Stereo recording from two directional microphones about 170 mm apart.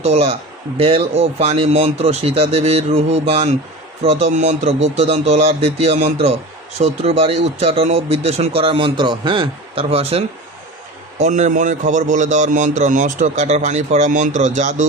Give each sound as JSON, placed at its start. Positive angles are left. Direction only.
{"t": 0.0, "sound": "speech", "side_deg": -40}